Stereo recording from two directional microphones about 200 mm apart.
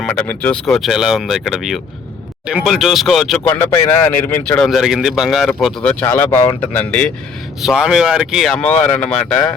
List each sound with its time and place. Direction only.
0.0 s speech: 5° left (ahead or behind)
7.6 s speech: 5° right (ahead or behind)